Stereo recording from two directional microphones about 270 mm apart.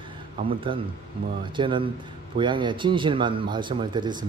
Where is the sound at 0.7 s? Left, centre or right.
Centre.